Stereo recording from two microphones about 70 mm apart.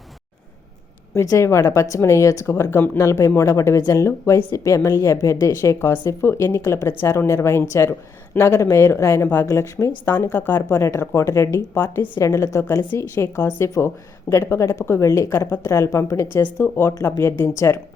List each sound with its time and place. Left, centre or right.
1.2 s a woman's voice: left
3.0 s a woman's voice: left
9.5 s a woman's voice: left
10.1 s speech: left
12.2 s a woman's voice: left